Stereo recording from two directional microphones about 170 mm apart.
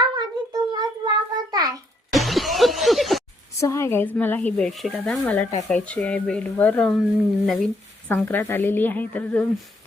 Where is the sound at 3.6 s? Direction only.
15° left (ahead or behind).